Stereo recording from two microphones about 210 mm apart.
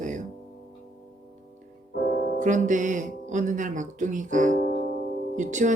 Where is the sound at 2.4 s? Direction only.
35° right (ahead or behind).